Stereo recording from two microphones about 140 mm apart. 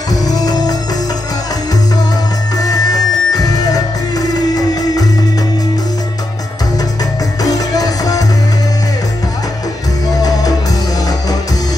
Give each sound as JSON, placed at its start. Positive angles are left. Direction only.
{"t": 0.1, "sound": "music", "side_deg": 25}
{"t": 2.5, "sound": "music", "side_deg": 25}
{"t": 7.4, "sound": "music", "side_deg": 25}